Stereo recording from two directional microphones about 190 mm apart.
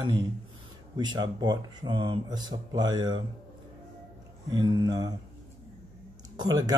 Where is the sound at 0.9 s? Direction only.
20° right (ahead or behind).